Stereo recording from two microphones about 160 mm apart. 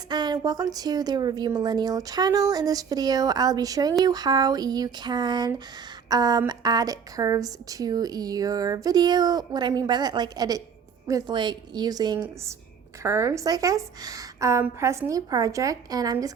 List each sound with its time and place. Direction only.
0.1 s a woman's voice: 25° right (ahead or behind)